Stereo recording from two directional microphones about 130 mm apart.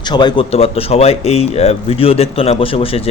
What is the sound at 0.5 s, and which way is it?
Speech, 50° left (ahead or behind).